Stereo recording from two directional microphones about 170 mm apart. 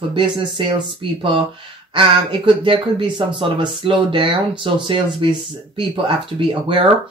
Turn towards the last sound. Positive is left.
turn(degrees=-30)  # may be behind; listen again after turning